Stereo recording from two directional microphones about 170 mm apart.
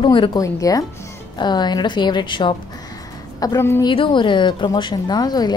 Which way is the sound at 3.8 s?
30° left (ahead or behind).